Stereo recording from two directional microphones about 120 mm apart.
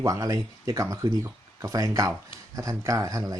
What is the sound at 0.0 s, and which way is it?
Speech, 30° right (ahead or behind).